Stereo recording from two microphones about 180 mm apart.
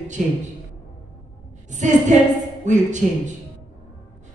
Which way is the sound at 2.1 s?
45° right (ahead or behind).